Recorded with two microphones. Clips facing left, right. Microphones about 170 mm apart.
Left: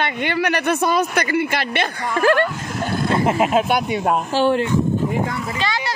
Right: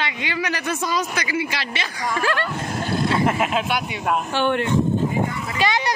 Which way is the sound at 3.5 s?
45° left (ahead or behind).